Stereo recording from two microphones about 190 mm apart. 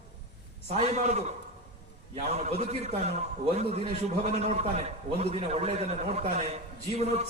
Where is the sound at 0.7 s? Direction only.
35° right (ahead or behind).